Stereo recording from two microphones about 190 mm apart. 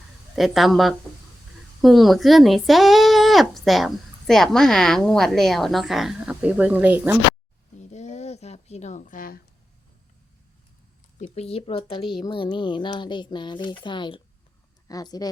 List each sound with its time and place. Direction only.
0.3 s speech: centre (ahead or behind)
7.8 s a sound: 40° left (ahead or behind)
11.2 s speech: 30° left (ahead or behind)